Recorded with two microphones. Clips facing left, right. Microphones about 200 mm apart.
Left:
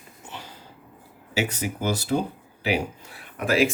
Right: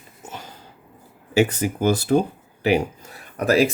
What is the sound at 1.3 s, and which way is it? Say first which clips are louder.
Speech: right 8 dB; 50° right (ahead or behind).